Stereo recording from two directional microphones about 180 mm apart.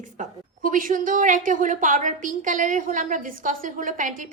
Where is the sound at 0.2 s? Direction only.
50° right (ahead or behind).